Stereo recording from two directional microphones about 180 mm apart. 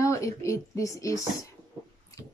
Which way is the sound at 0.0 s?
15° left (ahead or behind).